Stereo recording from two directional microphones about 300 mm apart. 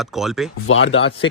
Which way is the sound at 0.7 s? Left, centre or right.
Left.